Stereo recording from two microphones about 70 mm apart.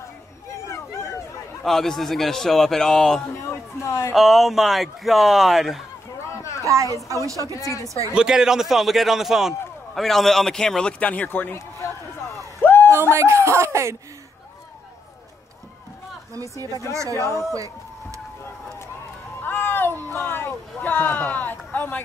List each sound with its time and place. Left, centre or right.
0.7 s a sound: left
1.6 s speech: centre
3.8 s speech: left
4.1 s speech: centre
6.6 s speech: right
8.1 s a man's voice: centre; by 11.5 s left
12.6 s a sound: left
13.1 s speech: right
16.3 s speech: right
19.4 s a sound: left